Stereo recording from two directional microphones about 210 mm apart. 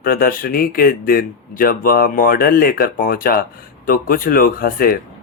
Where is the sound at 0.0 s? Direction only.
45° left (ahead or behind).